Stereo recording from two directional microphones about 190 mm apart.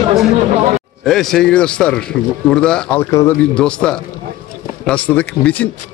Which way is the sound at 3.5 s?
5° left (ahead or behind).